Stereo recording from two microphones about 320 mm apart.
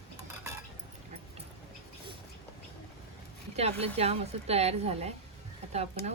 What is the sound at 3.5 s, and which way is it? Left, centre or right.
A woman's voice, centre.